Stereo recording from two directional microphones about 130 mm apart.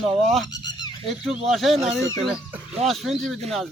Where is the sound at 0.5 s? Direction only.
30° left (ahead or behind).